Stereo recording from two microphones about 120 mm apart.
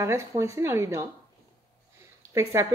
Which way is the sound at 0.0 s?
25° right (ahead or behind).